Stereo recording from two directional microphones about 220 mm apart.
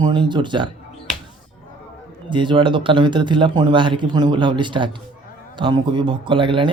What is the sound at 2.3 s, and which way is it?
Speech, 20° right (ahead or behind).